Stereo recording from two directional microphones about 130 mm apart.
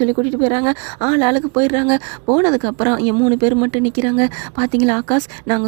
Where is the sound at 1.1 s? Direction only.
25° right (ahead or behind).